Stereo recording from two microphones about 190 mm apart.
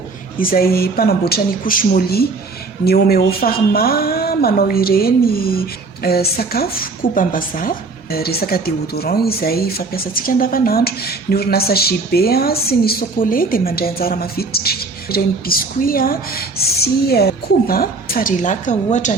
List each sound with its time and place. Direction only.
0.3 s speech: 50° left (ahead or behind)